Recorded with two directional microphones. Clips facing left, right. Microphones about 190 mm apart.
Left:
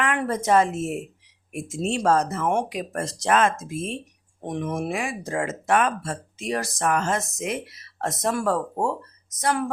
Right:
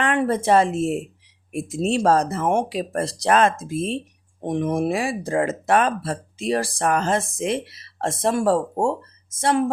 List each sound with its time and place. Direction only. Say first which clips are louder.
0.0 s speech: right 4 dB; 30° right (ahead or behind)